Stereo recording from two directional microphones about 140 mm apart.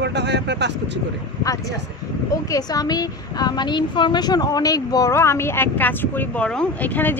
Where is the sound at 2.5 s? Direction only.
25° left (ahead or behind).